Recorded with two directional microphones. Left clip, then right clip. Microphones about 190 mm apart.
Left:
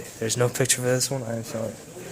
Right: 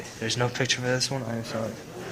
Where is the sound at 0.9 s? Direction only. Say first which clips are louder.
Left 2 dB; 45° left (ahead or behind).